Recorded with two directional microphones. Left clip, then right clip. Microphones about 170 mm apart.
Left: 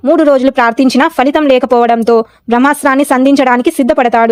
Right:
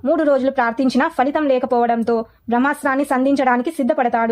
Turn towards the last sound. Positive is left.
turn(degrees=45)  # may be behind; listen again after turning